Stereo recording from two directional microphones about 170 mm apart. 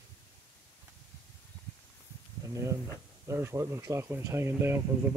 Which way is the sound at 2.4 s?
15° right (ahead or behind).